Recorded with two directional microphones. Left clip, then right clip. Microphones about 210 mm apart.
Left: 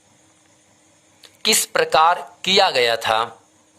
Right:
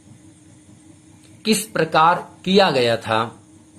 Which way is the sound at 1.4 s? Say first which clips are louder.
Left 2 dB; 40° left (ahead or behind).